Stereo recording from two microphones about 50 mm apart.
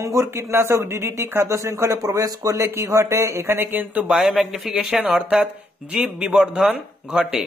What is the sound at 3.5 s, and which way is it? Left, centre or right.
Speech, right.